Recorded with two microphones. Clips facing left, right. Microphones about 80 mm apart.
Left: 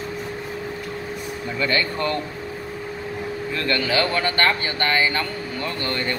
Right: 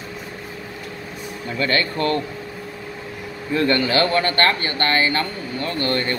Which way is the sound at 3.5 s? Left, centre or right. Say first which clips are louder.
Right 7 dB; right.